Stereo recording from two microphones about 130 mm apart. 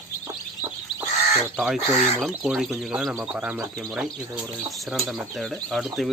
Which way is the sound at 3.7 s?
Centre (ahead or behind).